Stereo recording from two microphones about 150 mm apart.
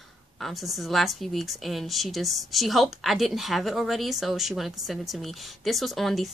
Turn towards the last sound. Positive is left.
turn(degrees=0)  # may be behind; listen again after turning